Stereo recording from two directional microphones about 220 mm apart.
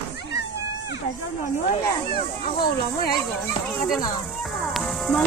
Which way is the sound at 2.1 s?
45° left (ahead or behind).